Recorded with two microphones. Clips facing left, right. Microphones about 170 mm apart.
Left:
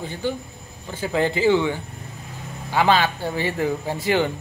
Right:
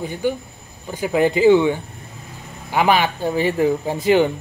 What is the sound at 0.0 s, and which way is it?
Speech, 15° right (ahead or behind).